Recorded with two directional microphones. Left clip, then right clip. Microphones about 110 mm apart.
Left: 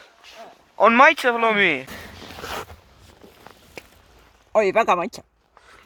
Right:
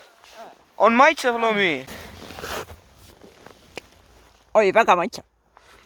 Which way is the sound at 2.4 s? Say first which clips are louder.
Even; 90° right.